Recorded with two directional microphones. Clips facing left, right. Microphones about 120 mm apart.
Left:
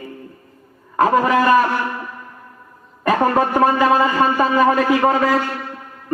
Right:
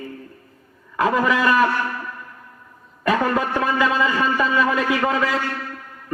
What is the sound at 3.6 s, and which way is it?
A man's voice, 40° left (ahead or behind).